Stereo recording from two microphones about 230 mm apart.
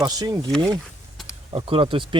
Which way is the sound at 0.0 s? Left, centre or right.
Centre.